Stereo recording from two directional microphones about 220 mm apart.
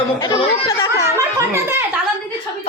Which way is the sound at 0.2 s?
20° left (ahead or behind).